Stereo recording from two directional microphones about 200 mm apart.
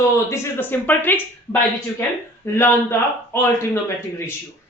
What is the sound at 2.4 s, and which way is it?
Speech, 15° left (ahead or behind).